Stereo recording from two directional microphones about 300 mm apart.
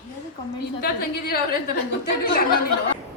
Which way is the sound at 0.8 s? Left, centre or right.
Left.